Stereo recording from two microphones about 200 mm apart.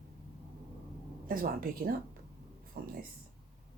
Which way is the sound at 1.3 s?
45° right (ahead or behind).